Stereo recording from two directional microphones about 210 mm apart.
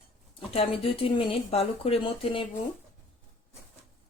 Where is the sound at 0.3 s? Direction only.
25° left (ahead or behind).